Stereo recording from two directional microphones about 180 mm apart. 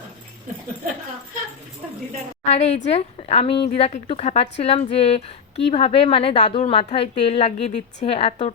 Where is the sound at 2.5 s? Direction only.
40° left (ahead or behind).